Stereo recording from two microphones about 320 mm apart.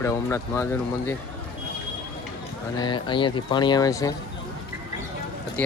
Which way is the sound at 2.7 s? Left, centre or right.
Centre.